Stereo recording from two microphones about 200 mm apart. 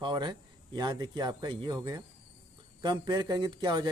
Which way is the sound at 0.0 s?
20° right (ahead or behind).